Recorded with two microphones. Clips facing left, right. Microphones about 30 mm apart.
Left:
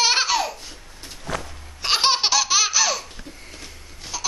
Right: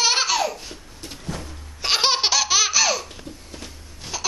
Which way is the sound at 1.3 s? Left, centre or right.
Left.